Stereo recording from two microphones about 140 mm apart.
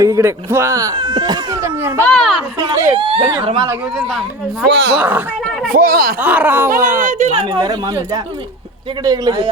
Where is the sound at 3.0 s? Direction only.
40° right (ahead or behind).